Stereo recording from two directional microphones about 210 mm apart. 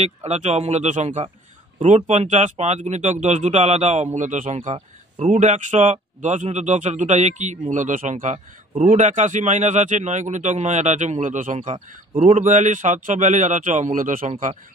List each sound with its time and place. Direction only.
0.0 s speech: 30° right (ahead or behind)